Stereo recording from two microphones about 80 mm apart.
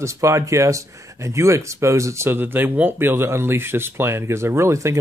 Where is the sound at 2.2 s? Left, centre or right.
Right.